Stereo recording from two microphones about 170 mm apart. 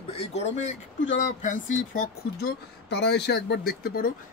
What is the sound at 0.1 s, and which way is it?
Speech, 40° left (ahead or behind).